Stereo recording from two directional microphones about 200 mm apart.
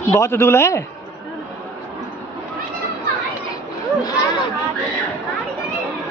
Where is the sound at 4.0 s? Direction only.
20° left (ahead or behind).